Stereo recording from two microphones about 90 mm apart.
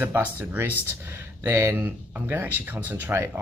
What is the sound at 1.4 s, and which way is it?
Speech, 30° right (ahead or behind).